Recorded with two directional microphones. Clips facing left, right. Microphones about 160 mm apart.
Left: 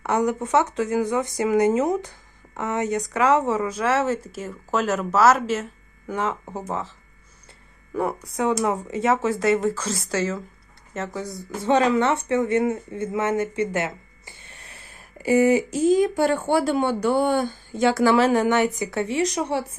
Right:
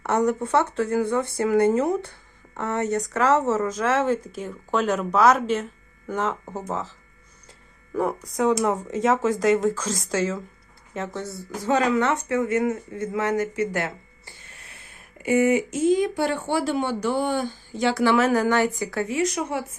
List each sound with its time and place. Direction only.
0.0 s speech: 10° left (ahead or behind)
7.9 s speech: 5° left (ahead or behind)
11.2 s speech: 15° left (ahead or behind)
11.6 s speech: 25° left (ahead or behind)
14.4 s speech: 30° left (ahead or behind)
18.3 s speech: 25° left (ahead or behind)